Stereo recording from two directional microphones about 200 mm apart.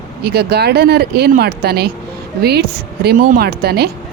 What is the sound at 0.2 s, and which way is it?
Speech, 55° right (ahead or behind).